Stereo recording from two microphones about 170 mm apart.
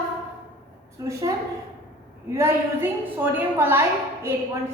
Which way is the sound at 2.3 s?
15° right (ahead or behind).